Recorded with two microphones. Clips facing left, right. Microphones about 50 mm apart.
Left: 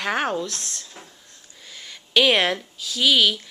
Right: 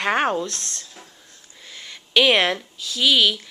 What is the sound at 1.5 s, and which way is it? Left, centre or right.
Speech, centre.